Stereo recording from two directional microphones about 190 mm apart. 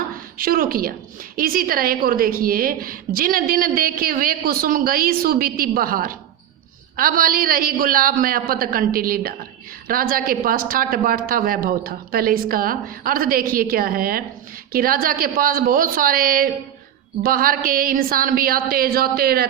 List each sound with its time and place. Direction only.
0.3 s a woman's voice: 50° right (ahead or behind)